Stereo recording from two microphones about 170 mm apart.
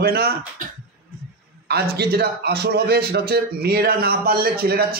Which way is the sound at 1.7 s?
65° right (ahead or behind).